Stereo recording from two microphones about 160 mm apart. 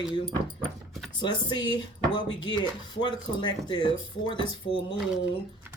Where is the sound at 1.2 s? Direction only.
30° left (ahead or behind).